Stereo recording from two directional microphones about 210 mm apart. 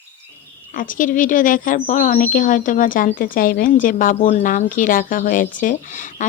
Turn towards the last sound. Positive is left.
turn(degrees=40)  # may be behind; listen again after turning